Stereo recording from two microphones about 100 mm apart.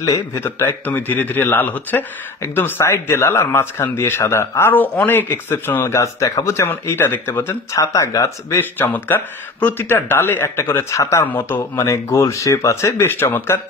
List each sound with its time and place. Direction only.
0.0 s a man's voice: 30° left (ahead or behind)
7.8 s speech: 35° left (ahead or behind)
8.5 s a man's voice: 20° left (ahead or behind)
11.2 s a man's voice: 20° left (ahead or behind)